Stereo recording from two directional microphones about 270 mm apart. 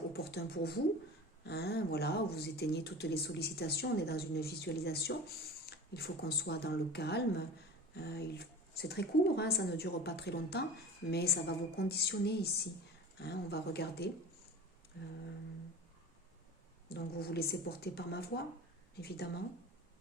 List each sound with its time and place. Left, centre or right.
0.1 s speech: left
16.9 s speech: left